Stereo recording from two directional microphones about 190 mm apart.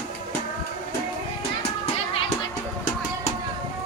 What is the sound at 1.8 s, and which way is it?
Music, 35° left (ahead or behind).